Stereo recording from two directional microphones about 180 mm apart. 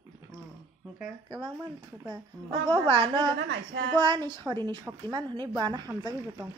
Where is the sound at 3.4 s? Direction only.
70° right (ahead or behind).